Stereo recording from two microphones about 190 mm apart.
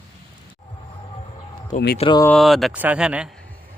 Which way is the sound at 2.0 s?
25° left (ahead or behind).